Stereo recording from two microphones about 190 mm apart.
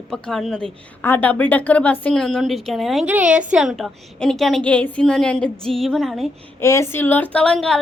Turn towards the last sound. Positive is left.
turn(degrees=5)  # may be behind; listen again after turning